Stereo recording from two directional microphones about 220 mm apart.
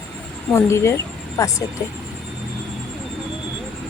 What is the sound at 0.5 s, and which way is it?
A woman's voice, 10° left (ahead or behind).